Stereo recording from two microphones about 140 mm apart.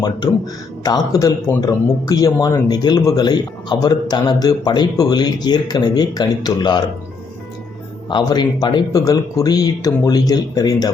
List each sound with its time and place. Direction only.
0.9 s a man's voice: 25° left (ahead or behind)
8.1 s a man's voice: 30° left (ahead or behind)